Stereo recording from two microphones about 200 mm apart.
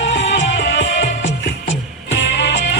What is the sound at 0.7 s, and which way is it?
Music, 65° left (ahead or behind).